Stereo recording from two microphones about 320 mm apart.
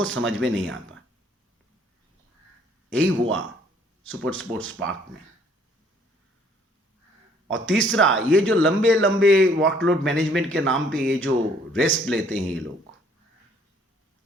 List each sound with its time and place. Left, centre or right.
0.0 s a man's voice: right
2.9 s a man's voice: right
7.4 s a man's voice: right